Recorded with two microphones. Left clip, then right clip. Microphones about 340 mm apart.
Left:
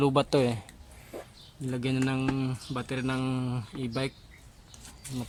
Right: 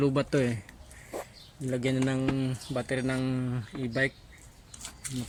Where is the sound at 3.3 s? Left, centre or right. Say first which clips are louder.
Even; left.